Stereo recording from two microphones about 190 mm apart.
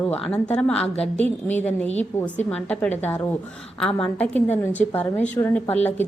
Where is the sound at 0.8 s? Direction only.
35° left (ahead or behind).